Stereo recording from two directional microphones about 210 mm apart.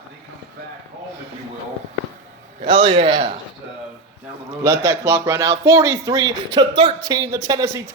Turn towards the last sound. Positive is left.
turn(degrees=-15)  # may be behind; listen again after turning